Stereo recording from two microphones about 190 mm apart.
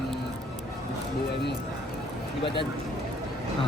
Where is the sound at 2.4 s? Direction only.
25° left (ahead or behind).